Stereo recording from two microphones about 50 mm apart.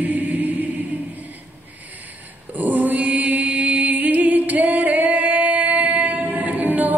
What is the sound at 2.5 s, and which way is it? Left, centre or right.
Mantra, right.